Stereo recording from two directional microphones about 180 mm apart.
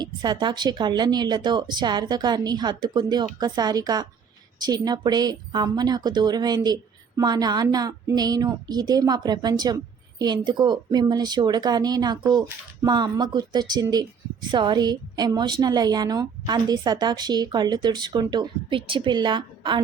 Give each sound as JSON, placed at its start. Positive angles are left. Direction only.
{"t": 0.0, "sound": "a woman's voice", "side_deg": -25}